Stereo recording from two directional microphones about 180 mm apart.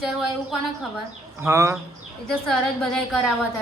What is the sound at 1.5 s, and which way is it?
Speech, 15° right (ahead or behind).